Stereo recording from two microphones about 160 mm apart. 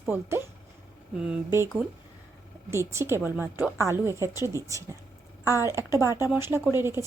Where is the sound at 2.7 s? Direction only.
15° right (ahead or behind).